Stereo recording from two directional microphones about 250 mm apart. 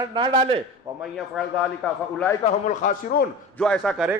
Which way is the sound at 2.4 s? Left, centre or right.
Left.